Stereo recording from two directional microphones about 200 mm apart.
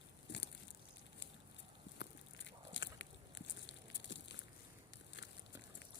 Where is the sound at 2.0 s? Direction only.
60° left (ahead or behind).